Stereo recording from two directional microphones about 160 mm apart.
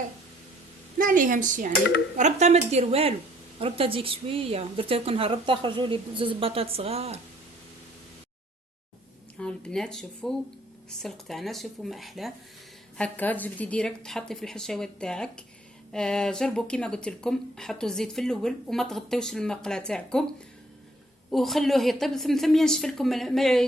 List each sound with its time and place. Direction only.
0.9 s a woman's voice: 55° right (ahead or behind); by 7.2 s 40° right (ahead or behind)
9.4 s speech: 5° left (ahead or behind)
13.0 s speech: 10° left (ahead or behind)